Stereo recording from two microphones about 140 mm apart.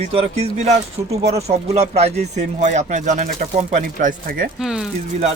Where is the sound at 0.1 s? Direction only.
45° right (ahead or behind); by 4.4 s 75° right (ahead or behind).